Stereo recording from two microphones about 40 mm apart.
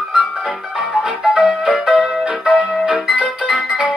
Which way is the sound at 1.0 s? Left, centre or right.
Centre.